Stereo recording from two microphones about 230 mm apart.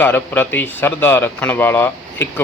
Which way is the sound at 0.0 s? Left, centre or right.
Centre.